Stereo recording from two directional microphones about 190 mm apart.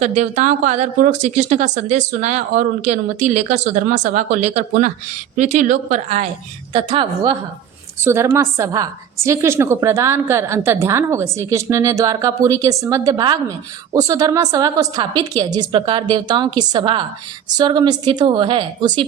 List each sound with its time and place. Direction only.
0.0 s speech: 40° right (ahead or behind)
6.7 s a woman's voice: 25° right (ahead or behind)
8.0 s a woman's voice: 15° right (ahead or behind)